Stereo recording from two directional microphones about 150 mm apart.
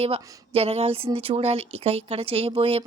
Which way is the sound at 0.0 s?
40° right (ahead or behind).